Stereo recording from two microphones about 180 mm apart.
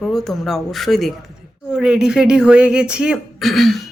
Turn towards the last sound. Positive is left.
turn(degrees=0)  # may be behind; listen again after turning